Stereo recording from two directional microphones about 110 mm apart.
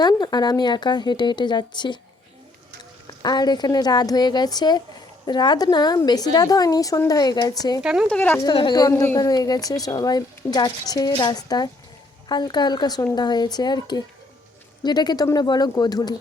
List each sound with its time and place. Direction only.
0.0 s speech: 40° left (ahead or behind)
3.2 s a woman's voice: 40° left (ahead or behind)
7.8 s speech: 5° right (ahead or behind)
8.0 s speech: 10° left (ahead or behind)
8.7 s a woman's voice: 35° left (ahead or behind)